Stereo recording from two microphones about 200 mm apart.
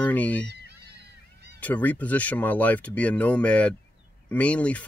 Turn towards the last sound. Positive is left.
turn(degrees=5)  # may be behind; listen again after turning